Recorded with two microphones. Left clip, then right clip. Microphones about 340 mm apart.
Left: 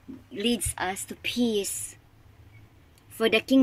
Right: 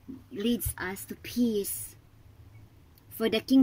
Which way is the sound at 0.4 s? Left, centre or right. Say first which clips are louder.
Left 4 dB; centre.